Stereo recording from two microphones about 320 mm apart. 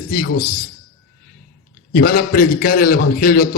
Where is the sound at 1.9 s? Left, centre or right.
Left.